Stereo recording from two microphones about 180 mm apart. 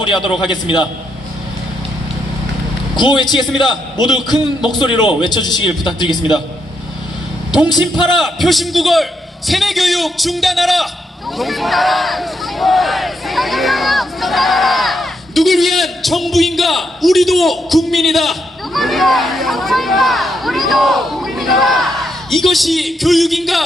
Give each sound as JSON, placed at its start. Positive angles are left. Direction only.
{"t": 0.0, "sound": "a man's voice", "side_deg": 25}
{"t": 2.9, "sound": "a man's voice", "side_deg": 25}
{"t": 7.5, "sound": "a man's voice", "side_deg": 25}
{"t": 8.1, "sound": "speech", "side_deg": 0}